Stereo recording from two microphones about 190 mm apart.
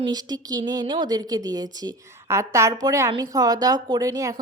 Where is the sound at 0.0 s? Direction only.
20° right (ahead or behind).